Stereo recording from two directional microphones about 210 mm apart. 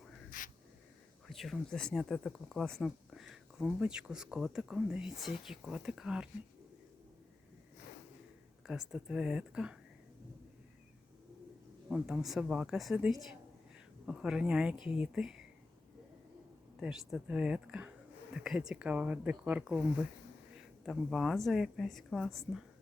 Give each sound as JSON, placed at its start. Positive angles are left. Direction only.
{"t": 0.3, "sound": "a sound", "side_deg": 40}
{"t": 1.3, "sound": "speech", "side_deg": 0}
{"t": 8.6, "sound": "speech", "side_deg": 0}
{"t": 11.9, "sound": "speech", "side_deg": -5}
{"t": 16.8, "sound": "speech", "side_deg": -5}
{"t": 20.8, "sound": "speech", "side_deg": 0}